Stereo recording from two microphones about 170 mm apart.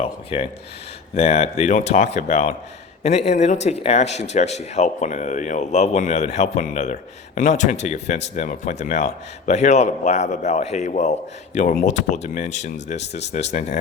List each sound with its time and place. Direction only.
0.0 s a man's voice: 35° left (ahead or behind)